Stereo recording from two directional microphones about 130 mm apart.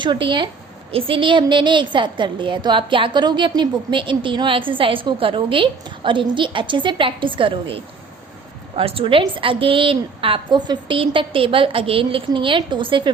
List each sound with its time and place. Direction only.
0.0 s a woman's voice: 35° right (ahead or behind)